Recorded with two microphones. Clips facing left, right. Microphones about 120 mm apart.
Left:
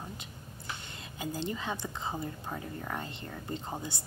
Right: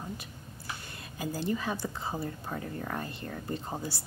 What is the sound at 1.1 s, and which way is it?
A woman's voice, 20° left (ahead or behind).